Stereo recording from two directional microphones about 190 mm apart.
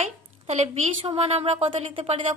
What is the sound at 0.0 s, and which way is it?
A woman's voice, 35° right (ahead or behind).